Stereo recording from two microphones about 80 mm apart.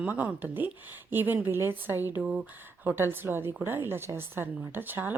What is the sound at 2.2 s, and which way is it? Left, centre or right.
Speech, centre.